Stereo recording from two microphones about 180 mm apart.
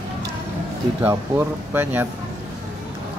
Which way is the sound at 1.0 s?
10° right (ahead or behind).